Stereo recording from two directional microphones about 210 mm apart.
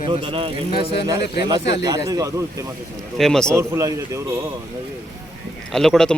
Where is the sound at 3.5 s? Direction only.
15° right (ahead or behind).